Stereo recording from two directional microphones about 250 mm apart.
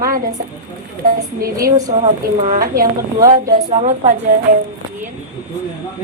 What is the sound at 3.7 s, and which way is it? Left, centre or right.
Speech, right.